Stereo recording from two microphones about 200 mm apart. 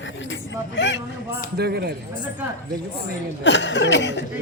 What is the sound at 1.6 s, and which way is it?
Speech, 55° right (ahead or behind).